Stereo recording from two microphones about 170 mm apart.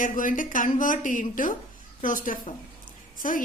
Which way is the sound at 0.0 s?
50° left (ahead or behind).